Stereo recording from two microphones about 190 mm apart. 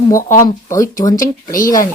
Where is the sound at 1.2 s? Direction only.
45° left (ahead or behind).